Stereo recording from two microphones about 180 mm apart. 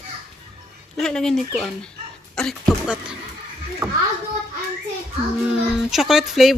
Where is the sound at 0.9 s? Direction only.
5° left (ahead or behind).